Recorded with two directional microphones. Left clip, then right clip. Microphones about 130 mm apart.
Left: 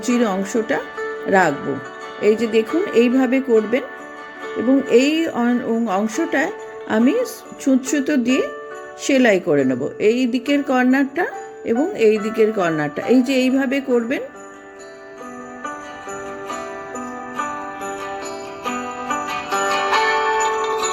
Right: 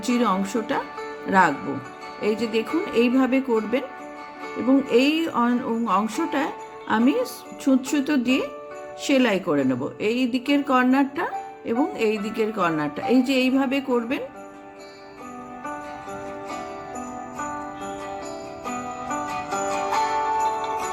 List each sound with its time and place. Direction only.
0.0 s speech: 25° left (ahead or behind)
4.9 s speech: 30° left (ahead or behind)
16.9 s jingle bell: 30° left (ahead or behind)